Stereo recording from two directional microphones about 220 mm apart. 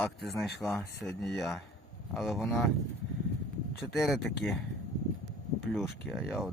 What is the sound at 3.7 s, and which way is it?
Speech, centre (ahead or behind).